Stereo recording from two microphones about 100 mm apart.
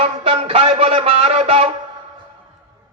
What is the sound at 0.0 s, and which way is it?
Music, 70° right (ahead or behind).